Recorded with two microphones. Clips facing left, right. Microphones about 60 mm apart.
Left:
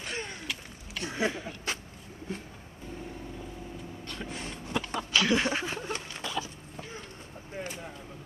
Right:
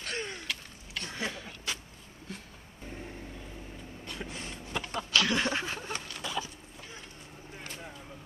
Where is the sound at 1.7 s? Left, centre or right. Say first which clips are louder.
Left 2 dB; left.